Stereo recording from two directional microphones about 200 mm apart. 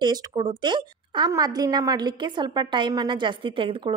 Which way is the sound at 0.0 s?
20° right (ahead or behind).